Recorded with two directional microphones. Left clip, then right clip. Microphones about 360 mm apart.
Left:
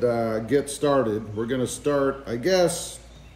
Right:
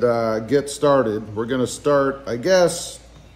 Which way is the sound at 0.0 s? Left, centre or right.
Centre.